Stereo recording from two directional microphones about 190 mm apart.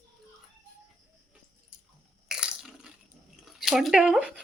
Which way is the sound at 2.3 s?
5° right (ahead or behind).